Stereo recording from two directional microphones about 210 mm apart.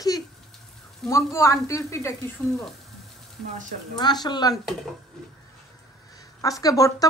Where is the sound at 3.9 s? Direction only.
20° left (ahead or behind).